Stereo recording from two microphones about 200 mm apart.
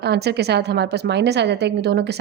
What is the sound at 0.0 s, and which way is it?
A woman's voice, 55° right (ahead or behind).